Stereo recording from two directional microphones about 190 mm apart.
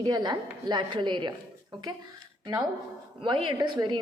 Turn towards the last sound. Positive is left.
turn(degrees=-25)  # may be behind; listen again after turning